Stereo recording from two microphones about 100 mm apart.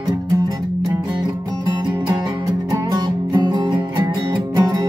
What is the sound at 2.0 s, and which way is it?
Music, 40° right (ahead or behind).